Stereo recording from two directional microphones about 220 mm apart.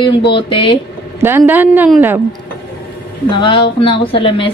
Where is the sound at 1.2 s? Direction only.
10° right (ahead or behind).